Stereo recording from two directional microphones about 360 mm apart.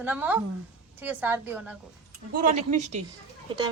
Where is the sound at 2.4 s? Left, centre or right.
Centre.